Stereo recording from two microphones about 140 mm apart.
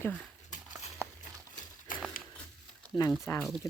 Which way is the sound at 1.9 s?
75° left (ahead or behind).